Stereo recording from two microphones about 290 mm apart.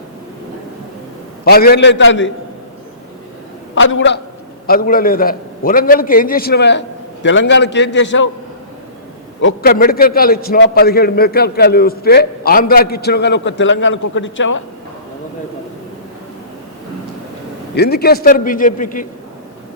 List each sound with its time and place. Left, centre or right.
1.5 s a man's voice: left
3.8 s a man's voice: left
9.4 s a man's voice: left
17.7 s a man's voice: left